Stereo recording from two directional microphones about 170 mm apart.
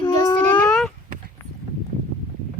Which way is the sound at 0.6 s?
5° left (ahead or behind).